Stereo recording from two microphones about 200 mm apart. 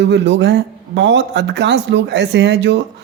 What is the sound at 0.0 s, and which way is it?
Speech, 60° right (ahead or behind).